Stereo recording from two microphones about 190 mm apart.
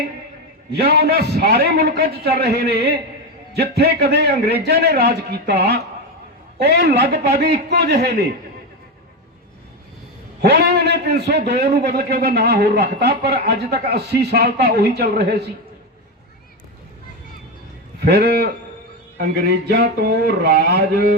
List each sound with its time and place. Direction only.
0.7 s a man's voice: 60° right (ahead or behind)
10.4 s a man's voice: 60° right (ahead or behind)
18.0 s a man's voice: 55° right (ahead or behind)